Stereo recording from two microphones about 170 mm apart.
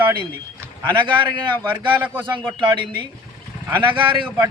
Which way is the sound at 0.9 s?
30° right (ahead or behind).